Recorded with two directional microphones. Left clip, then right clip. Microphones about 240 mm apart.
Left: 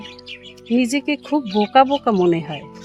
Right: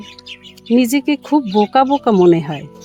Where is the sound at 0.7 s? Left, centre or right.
Right.